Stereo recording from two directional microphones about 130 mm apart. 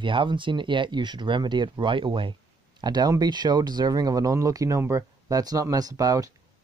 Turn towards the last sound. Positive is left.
turn(degrees=-25)  # may be behind; listen again after turning